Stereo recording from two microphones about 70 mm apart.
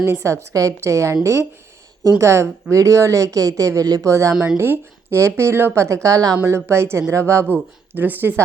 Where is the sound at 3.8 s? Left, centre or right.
Right.